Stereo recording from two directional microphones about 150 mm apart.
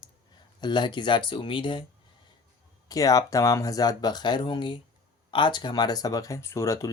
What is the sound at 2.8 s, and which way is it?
Speech, 25° left (ahead or behind).